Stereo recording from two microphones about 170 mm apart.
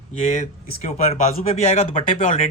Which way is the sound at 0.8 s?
40° left (ahead or behind).